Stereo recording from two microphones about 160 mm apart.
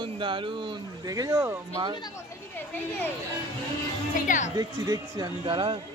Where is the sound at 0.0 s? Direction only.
30° right (ahead or behind).